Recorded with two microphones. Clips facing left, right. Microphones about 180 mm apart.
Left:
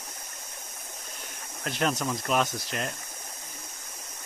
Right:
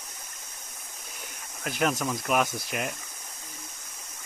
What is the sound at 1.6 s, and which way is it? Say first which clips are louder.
Speech: right 1 dB; 5° right (ahead or behind).